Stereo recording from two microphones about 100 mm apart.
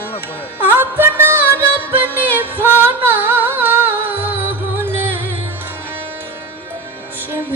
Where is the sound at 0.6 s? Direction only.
20° right (ahead or behind).